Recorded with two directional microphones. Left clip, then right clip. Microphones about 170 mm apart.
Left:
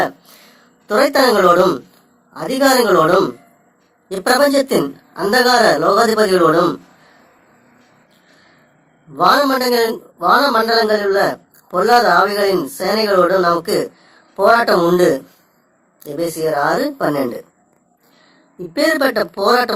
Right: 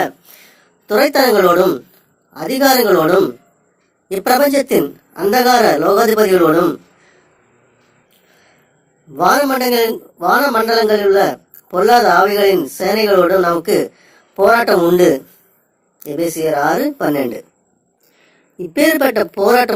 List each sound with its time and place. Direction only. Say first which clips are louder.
0.0 s a sound: even; 25° right (ahead or behind)
2.3 s a man's voice: right 1 dB; 25° right (ahead or behind)
9.1 s a man's voice: even; 25° right (ahead or behind)
18.6 s a man's voice: right 2 dB; 30° right (ahead or behind)